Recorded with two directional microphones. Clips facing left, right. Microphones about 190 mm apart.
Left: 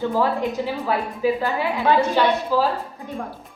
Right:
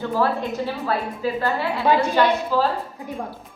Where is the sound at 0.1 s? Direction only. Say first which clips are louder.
Left 1 dB; 15° left (ahead or behind).